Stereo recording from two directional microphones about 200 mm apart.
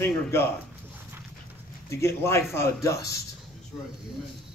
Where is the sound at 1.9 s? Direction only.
15° left (ahead or behind).